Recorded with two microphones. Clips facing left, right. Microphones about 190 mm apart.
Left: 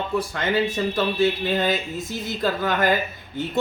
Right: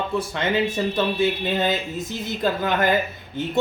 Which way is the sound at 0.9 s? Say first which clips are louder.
Even; 20° right (ahead or behind).